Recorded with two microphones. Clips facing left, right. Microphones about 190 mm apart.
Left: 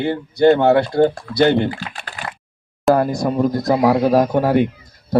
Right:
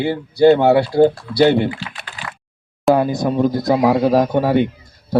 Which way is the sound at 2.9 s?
Centre (ahead or behind).